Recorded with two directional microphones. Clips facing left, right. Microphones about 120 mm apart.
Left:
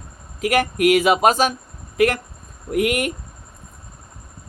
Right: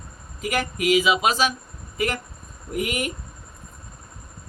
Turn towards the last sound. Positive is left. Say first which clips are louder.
# left 6 dB
turn(degrees=60)  # may be behind; listen again after turning